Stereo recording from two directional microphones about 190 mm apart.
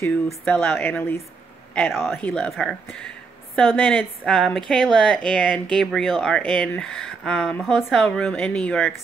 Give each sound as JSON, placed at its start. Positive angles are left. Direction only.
{"t": 0.5, "sound": "speech", "side_deg": 10}